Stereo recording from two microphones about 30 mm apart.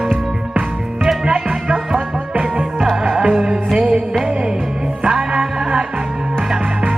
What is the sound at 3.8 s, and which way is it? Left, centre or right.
Music, right.